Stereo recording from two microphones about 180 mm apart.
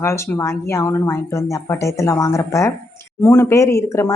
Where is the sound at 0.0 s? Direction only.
15° left (ahead or behind).